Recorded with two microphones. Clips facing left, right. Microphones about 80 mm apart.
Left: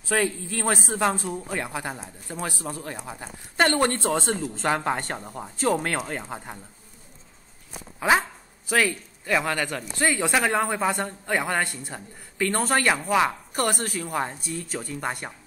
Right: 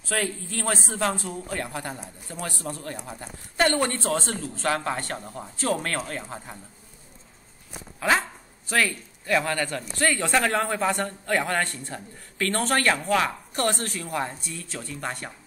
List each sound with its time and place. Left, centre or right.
0.4 s speech: centre; by 6.6 s left
8.0 s speech: centre